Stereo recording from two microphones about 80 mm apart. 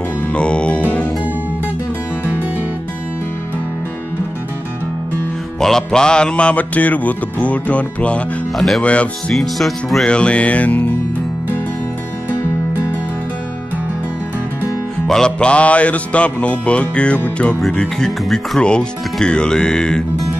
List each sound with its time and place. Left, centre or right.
0.3 s music: centre
5.6 s music: centre
8.5 s speech: centre
8.8 s music: centre
9.3 s speech: centre
10.0 s music: centre
15.0 s music: centre
17.6 s music: centre